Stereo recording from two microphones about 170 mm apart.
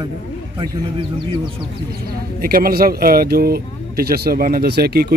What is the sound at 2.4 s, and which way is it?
Speech, 60° right (ahead or behind).